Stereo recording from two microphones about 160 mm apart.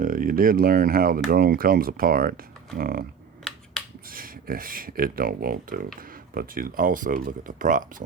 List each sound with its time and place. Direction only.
0.0 s speech: 60° right (ahead or behind)
3.5 s finger snapping: 5° left (ahead or behind)
4.1 s speech: 65° right (ahead or behind)